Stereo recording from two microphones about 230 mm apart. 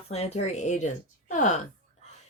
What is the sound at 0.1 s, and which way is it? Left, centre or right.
Speech, left.